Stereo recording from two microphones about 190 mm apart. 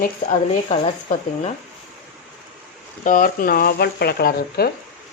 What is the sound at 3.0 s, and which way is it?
A woman's voice, 45° left (ahead or behind).